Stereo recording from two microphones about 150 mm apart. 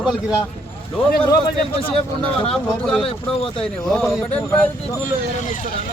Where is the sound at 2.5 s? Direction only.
5° left (ahead or behind).